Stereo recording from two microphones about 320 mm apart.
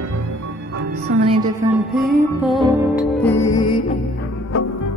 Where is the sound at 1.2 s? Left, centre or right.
Centre.